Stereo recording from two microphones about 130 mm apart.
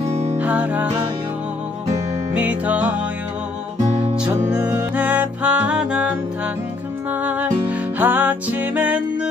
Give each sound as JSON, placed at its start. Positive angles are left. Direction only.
{"t": 0.1, "sound": "music", "side_deg": -55}
{"t": 0.4, "sound": "music", "side_deg": -10}
{"t": 2.3, "sound": "music", "side_deg": -10}
{"t": 3.8, "sound": "music", "side_deg": -55}
{"t": 4.6, "sound": "music", "side_deg": -15}